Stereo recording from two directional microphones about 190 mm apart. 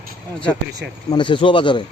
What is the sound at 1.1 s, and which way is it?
Speech, 25° left (ahead or behind).